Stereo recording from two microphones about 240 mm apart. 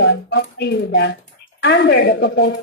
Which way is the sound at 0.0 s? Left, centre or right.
Left.